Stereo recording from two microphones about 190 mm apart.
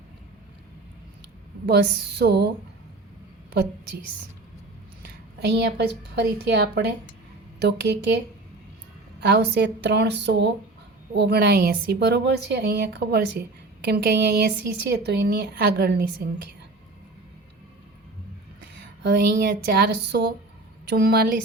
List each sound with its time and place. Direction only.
1.6 s a woman's voice: 60° right (ahead or behind)
5.0 s a woman's voice: 60° right (ahead or behind)
9.2 s a woman's voice: 65° right (ahead or behind)
19.0 s a woman's voice: 55° right (ahead or behind)